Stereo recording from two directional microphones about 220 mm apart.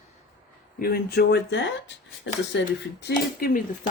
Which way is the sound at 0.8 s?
45° left (ahead or behind).